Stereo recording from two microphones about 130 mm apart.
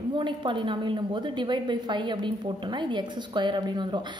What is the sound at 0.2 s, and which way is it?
A woman's voice, 40° right (ahead or behind).